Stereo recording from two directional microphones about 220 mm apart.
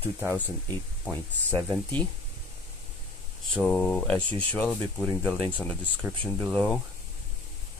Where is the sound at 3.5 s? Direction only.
5° left (ahead or behind).